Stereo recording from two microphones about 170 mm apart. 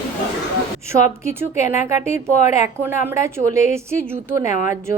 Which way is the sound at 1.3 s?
15° right (ahead or behind).